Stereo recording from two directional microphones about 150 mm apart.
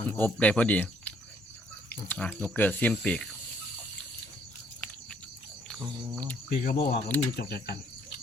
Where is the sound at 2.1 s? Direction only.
10° left (ahead or behind).